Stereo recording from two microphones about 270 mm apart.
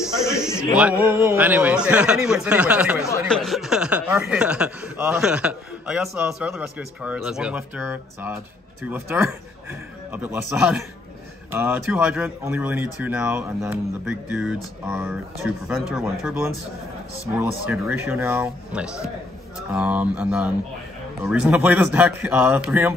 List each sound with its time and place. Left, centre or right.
0.7 s speech: centre